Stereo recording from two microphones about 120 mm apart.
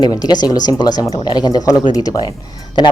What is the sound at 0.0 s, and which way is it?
Speech, 35° left (ahead or behind).